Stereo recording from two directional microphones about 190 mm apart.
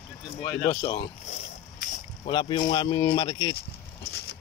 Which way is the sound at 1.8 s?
40° left (ahead or behind).